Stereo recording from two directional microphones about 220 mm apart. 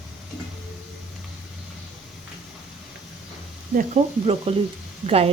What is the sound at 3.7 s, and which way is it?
Speech, 30° right (ahead or behind).